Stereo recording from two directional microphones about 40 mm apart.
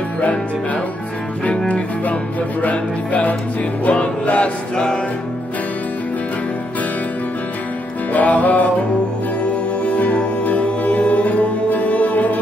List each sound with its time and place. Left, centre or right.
2.6 s music: left
8.1 s music: left